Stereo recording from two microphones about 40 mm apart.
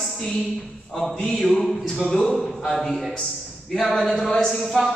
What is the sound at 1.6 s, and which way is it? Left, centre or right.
Speech, centre.